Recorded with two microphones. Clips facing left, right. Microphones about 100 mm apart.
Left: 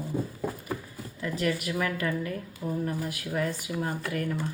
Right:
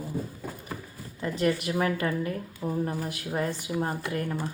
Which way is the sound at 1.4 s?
30° right (ahead or behind).